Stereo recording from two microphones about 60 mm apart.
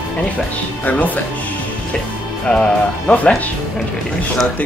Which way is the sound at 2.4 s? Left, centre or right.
Centre.